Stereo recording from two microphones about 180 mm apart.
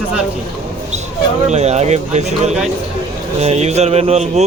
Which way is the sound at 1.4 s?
40° right (ahead or behind).